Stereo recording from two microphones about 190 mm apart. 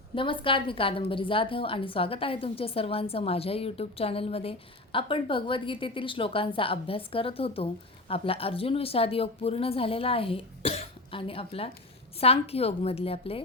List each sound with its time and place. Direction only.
0.2 s a woman's voice: 25° left (ahead or behind)